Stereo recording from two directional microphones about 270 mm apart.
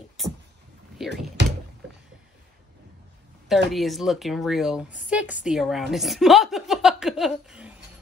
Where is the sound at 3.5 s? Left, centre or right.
Centre.